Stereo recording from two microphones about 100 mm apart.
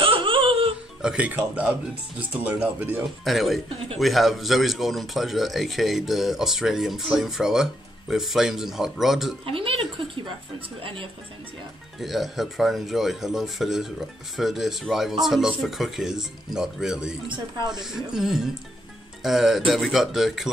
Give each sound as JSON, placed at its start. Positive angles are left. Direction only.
{"t": 0.0, "sound": "music", "side_deg": -60}
{"t": 1.0, "sound": "speech", "side_deg": -15}
{"t": 3.3, "sound": "speech", "side_deg": 0}
{"t": 9.5, "sound": "speech", "side_deg": -65}
{"t": 12.0, "sound": "speech", "side_deg": 0}